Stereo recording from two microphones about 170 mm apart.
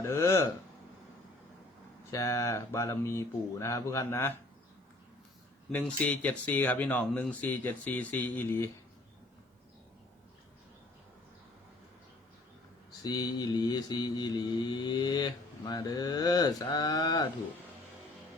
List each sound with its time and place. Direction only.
0.0 s speech: 15° left (ahead or behind)
2.0 s speech: 20° left (ahead or behind)
5.7 s speech: 10° left (ahead or behind)
13.0 s mantra: 25° left (ahead or behind)